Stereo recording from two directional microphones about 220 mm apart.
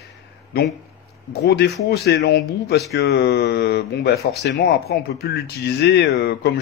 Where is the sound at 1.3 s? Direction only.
45° left (ahead or behind).